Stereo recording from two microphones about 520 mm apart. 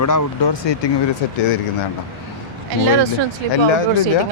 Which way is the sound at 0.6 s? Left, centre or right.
Left.